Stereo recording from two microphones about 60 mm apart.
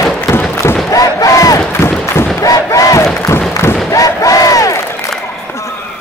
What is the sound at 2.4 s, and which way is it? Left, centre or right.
Crowd, left.